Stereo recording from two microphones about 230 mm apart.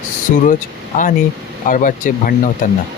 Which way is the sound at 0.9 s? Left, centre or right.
Left.